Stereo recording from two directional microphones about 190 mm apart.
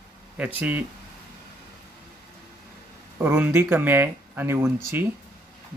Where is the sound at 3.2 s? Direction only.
10° right (ahead or behind).